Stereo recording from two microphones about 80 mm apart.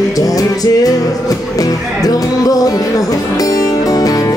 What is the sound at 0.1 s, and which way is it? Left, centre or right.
Music, left.